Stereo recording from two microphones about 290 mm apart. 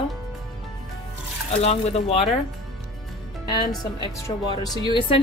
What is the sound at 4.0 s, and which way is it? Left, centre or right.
A woman's voice, centre.